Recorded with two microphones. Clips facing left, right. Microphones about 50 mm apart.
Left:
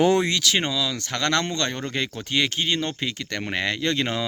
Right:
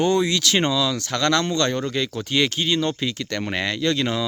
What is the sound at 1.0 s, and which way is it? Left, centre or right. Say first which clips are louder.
Speech: right 3 dB; left.